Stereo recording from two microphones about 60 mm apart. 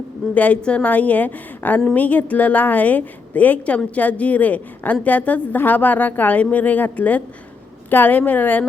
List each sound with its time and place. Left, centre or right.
0.3 s a woman's voice: left